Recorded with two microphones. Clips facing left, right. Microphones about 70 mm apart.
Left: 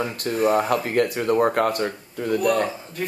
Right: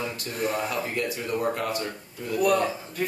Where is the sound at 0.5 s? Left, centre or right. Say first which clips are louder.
Left 8 dB; left.